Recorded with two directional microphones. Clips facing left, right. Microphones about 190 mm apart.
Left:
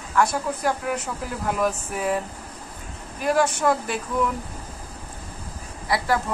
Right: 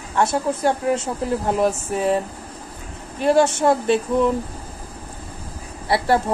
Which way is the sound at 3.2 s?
30° right (ahead or behind).